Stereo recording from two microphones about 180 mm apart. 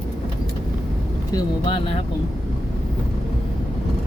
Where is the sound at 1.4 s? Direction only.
25° left (ahead or behind).